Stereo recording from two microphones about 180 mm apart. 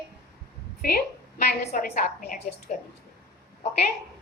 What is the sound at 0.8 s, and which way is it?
A woman's voice, 55° left (ahead or behind).